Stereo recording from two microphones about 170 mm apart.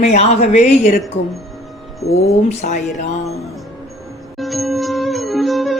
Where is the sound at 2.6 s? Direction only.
45° left (ahead or behind).